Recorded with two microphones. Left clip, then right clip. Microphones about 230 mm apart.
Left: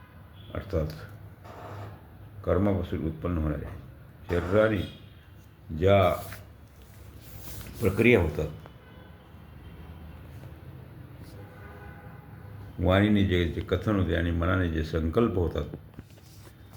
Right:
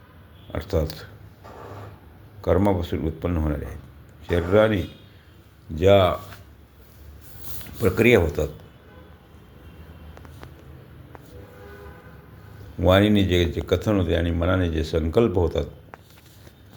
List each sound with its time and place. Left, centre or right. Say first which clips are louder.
0.5 s speech: right 6 dB; right
2.4 s speech: right 6 dB; right
7.8 s speech: right 5 dB; right
12.8 s speech: right 6 dB; centre